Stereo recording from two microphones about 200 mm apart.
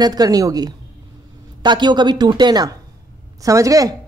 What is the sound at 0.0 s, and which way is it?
Speech, 20° right (ahead or behind).